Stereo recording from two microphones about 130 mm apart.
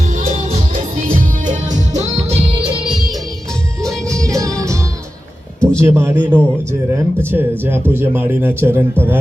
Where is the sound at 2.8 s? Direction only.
5° right (ahead or behind).